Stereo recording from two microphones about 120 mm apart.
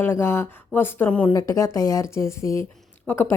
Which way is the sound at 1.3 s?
25° left (ahead or behind).